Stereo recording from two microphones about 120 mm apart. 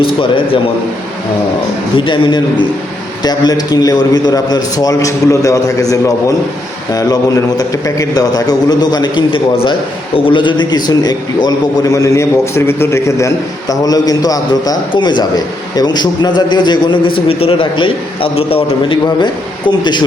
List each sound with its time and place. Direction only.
0.0 s a man's voice: 45° left (ahead or behind)
2.0 s a man's voice: 40° left (ahead or behind)